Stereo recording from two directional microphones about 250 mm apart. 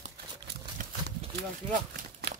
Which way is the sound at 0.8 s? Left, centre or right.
Right.